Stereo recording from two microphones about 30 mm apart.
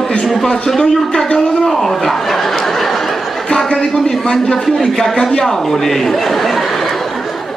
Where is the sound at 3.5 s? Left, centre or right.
Left.